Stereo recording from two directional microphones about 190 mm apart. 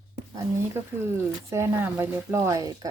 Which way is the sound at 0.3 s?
15° right (ahead or behind).